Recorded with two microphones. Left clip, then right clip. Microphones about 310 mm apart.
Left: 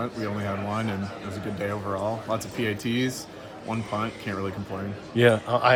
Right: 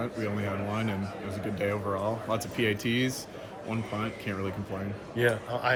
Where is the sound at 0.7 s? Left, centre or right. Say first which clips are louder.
Left 3 dB; centre.